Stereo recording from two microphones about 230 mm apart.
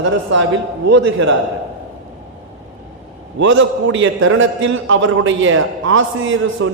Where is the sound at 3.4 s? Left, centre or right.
Right.